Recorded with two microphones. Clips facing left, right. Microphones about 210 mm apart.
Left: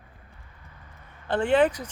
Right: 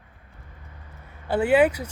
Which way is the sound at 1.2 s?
10° right (ahead or behind).